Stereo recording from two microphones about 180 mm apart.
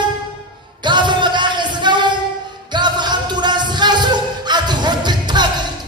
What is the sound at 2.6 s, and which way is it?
Music, 25° right (ahead or behind).